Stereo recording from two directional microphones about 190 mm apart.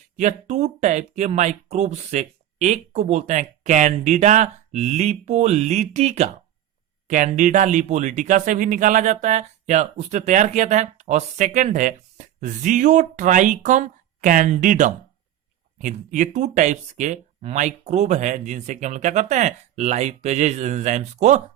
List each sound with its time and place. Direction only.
0.2 s speech: 40° right (ahead or behind)